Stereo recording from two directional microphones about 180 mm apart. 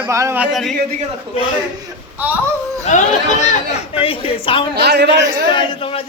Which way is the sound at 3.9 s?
30° left (ahead or behind).